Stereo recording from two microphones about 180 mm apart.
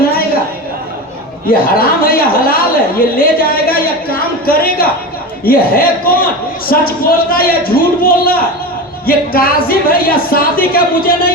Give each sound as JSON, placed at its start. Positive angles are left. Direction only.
{"t": 1.5, "sound": "a woman's voice", "side_deg": 55}